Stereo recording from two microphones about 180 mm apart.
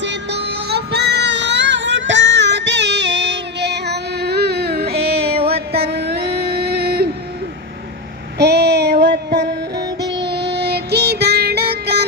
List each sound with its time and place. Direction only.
0.0 s music: 75° right (ahead or behind); by 7.1 s 60° right (ahead or behind)
8.4 s child singing: 70° right (ahead or behind)
9.7 s music: 20° right (ahead or behind)
10.2 s child singing: 70° right (ahead or behind)